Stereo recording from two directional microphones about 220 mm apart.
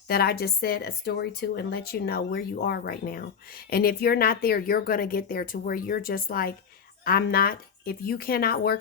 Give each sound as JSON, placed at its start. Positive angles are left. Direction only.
{"t": 0.1, "sound": "speech", "side_deg": 45}